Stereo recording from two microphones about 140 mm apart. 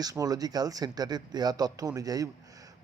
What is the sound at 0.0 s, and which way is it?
Speech, 25° right (ahead or behind).